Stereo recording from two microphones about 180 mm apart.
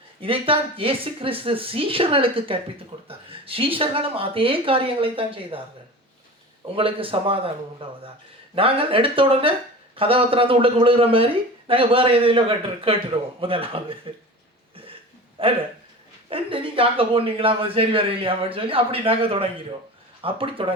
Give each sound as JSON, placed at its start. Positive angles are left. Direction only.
{"t": 0.2, "sound": "a man's voice", "side_deg": -30}
{"t": 6.7, "sound": "a man's voice", "side_deg": -30}
{"t": 15.4, "sound": "a man's voice", "side_deg": -30}